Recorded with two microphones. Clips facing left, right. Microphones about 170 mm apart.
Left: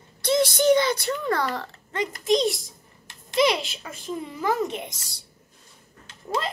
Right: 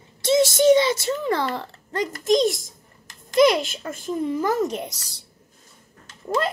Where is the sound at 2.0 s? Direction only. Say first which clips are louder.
Right 3 dB; centre (ahead or behind).